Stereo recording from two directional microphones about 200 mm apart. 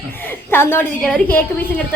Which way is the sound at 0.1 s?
10° left (ahead or behind).